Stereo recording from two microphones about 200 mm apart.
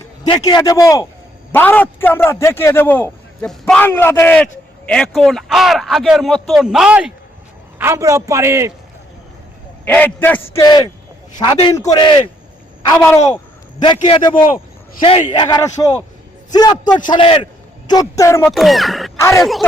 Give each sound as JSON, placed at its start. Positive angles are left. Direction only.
{"t": 0.3, "sound": "a man's voice", "side_deg": 20}
{"t": 9.8, "sound": "a man's voice", "side_deg": 10}
{"t": 10.5, "sound": "a man's voice", "side_deg": 20}
{"t": 13.8, "sound": "a man's voice", "side_deg": 25}
{"t": 14.4, "sound": "a sound", "side_deg": 45}
{"t": 15.3, "sound": "a man's voice", "side_deg": 20}
{"t": 17.8, "sound": "a man's voice", "side_deg": 15}
{"t": 18.4, "sound": "a man's voice", "side_deg": 0}
{"t": 19.2, "sound": "a man's voice", "side_deg": 15}